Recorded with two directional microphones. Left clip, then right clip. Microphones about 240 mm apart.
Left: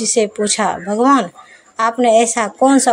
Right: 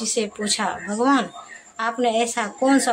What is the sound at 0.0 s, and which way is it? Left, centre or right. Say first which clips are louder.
Speech: left 9 dB; left.